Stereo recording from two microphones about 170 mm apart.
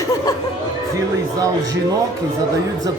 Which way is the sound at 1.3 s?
20° right (ahead or behind).